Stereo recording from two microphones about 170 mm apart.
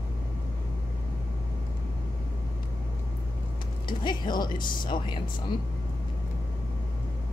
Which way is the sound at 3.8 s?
25° left (ahead or behind).